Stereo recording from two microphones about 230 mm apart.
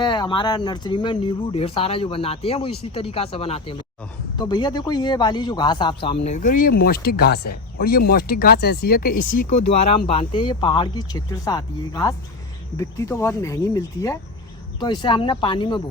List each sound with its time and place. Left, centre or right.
0.0 s speech: centre